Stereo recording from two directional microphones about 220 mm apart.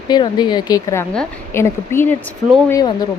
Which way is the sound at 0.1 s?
20° left (ahead or behind).